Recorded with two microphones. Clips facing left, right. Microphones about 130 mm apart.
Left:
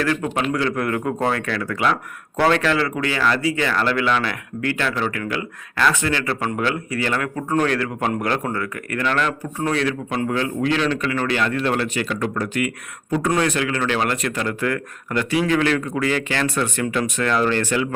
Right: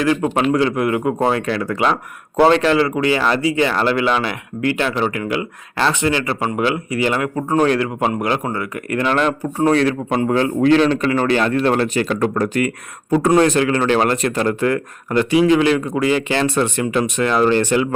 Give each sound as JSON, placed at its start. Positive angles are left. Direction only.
{"t": 0.0, "sound": "speech", "side_deg": -20}
{"t": 0.8, "sound": "a man's voice", "side_deg": -15}